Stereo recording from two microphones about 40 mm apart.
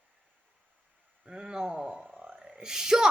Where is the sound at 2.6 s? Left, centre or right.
Centre.